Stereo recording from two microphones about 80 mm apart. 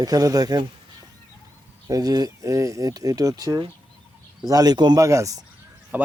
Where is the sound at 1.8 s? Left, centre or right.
Right.